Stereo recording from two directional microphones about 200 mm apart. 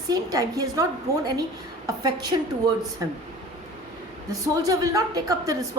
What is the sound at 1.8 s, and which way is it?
A woman's voice, 20° right (ahead or behind).